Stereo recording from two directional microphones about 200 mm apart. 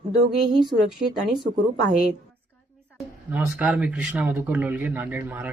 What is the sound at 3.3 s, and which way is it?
A man's voice, 10° right (ahead or behind).